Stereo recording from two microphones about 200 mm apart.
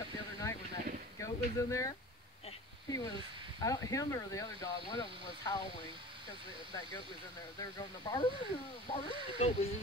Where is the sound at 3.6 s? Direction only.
15° left (ahead or behind).